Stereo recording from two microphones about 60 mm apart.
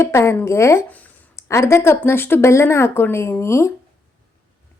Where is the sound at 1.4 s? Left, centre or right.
Left.